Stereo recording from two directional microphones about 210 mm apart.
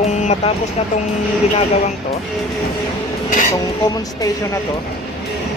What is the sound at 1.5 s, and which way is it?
Speech, 30° left (ahead or behind).